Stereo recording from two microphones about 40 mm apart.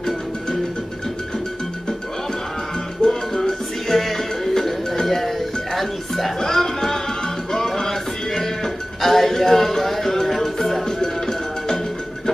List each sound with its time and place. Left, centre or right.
3.0 s music: centre